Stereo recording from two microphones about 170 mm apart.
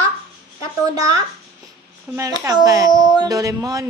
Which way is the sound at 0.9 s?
20° right (ahead or behind).